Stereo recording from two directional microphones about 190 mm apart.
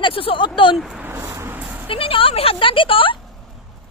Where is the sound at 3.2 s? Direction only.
Centre (ahead or behind).